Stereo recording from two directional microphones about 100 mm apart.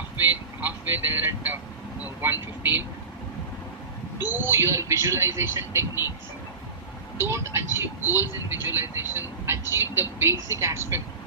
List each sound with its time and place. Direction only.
0.2 s vehicle: 20° right (ahead or behind)
2.0 s speech: 20° right (ahead or behind)
4.4 s speech: 25° right (ahead or behind)
7.2 s speech: 25° right (ahead or behind)